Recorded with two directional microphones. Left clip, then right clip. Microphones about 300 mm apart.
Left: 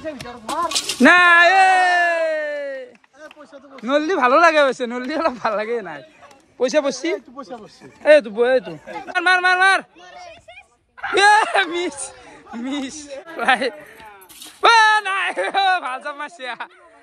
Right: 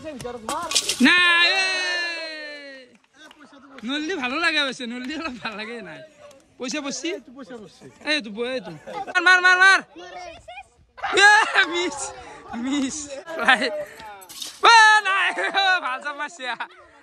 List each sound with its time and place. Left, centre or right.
1.0 s a sound: centre
3.8 s speech: centre
8.6 s speech: centre
9.1 s speech: centre
10.2 s a sound: right
11.1 s speech: centre
12.2 s chatter: right
12.6 s a man's voice: centre